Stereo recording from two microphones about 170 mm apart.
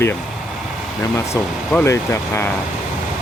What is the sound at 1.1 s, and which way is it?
Speech, 15° left (ahead or behind).